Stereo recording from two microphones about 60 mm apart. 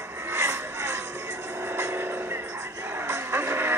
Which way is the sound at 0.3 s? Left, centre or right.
Right.